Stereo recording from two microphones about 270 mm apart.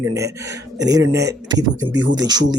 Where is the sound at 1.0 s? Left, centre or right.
Right.